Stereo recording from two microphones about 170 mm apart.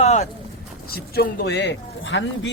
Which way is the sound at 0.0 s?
40° left (ahead or behind).